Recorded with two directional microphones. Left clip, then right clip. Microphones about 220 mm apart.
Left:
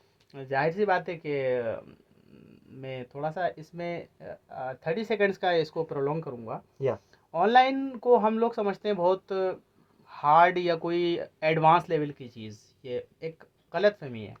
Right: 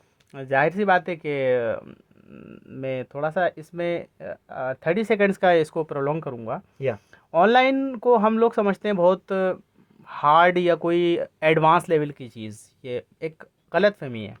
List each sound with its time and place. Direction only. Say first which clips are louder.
0.3 s speech: right 6 dB; 55° right (ahead or behind)